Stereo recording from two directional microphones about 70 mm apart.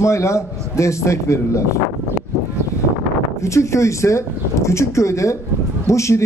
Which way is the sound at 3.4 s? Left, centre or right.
Left.